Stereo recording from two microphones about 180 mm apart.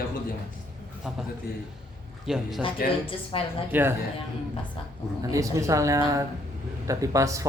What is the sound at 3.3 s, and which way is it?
Speech, 30° left (ahead or behind).